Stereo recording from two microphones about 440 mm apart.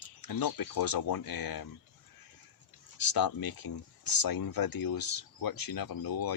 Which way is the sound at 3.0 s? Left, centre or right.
Left.